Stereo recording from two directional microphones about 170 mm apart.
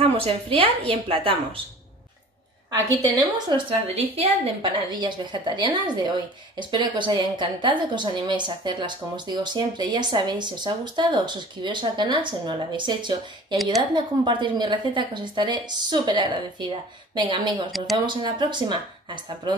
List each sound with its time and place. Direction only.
0.0 s a woman's voice: 35° right (ahead or behind)
2.7 s speech: 25° right (ahead or behind)